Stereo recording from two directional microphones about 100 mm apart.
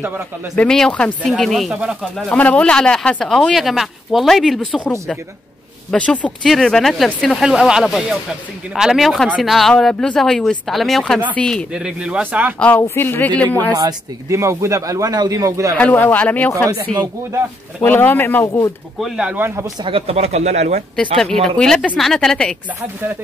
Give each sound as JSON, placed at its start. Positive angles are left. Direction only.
{"t": 0.6, "sound": "speech", "side_deg": 5}
{"t": 2.2, "sound": "speech", "side_deg": 15}
{"t": 5.9, "sound": "speech", "side_deg": 15}
{"t": 11.7, "sound": "speech", "side_deg": -5}
{"t": 12.5, "sound": "speech", "side_deg": 15}
{"t": 13.7, "sound": "speech", "side_deg": -35}
{"t": 15.8, "sound": "speech", "side_deg": 20}
{"t": 17.8, "sound": "speech", "side_deg": 20}
{"t": 18.9, "sound": "speech", "side_deg": -5}
{"t": 19.3, "sound": "speech", "side_deg": -20}
{"t": 19.8, "sound": "speech", "side_deg": -80}
{"t": 21.2, "sound": "speech", "side_deg": 5}